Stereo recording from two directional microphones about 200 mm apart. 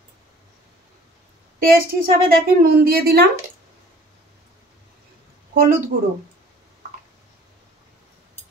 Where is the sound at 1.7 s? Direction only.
45° right (ahead or behind).